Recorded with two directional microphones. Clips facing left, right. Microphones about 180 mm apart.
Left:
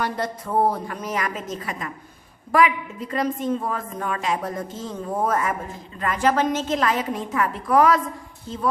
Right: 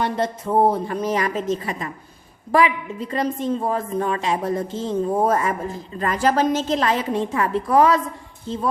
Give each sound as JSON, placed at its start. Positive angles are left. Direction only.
{"t": 0.0, "sound": "a woman's voice", "side_deg": -25}